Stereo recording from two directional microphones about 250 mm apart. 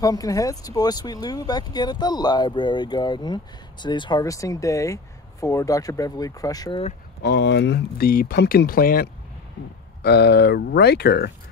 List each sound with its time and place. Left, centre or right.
0.0 s speech: centre
7.2 s speech: left